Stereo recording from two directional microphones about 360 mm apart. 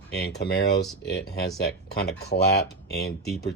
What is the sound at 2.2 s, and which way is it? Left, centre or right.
Speech, left.